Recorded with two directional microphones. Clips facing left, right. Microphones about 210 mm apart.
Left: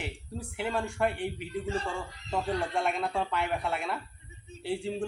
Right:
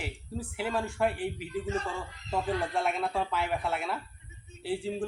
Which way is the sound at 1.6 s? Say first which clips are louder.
Even; 30° left (ahead or behind).